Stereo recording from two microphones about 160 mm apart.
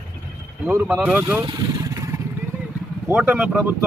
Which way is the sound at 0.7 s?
15° right (ahead or behind).